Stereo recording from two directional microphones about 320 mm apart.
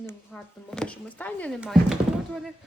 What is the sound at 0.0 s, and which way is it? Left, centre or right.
Speech, centre.